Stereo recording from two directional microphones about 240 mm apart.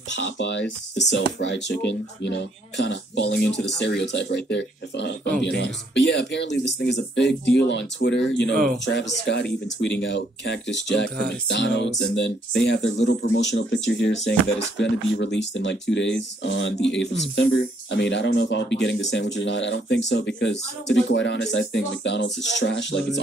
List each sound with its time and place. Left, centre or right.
0.1 s speech: left